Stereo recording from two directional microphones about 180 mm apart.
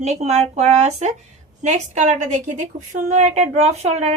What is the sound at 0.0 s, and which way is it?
A woman's voice, 40° right (ahead or behind).